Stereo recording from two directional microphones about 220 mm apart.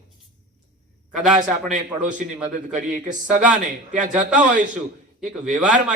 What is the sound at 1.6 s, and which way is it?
A man's voice, 35° right (ahead or behind).